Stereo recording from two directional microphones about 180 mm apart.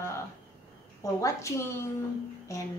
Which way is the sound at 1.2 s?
15° left (ahead or behind).